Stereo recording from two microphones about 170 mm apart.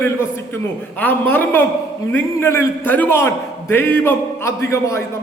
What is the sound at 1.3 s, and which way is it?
A man's voice, 10° left (ahead or behind).